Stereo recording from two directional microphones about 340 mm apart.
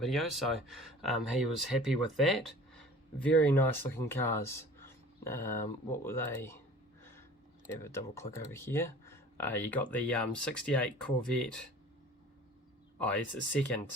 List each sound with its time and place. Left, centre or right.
0.0 s speech: centre
7.8 s speech: centre
13.0 s speech: centre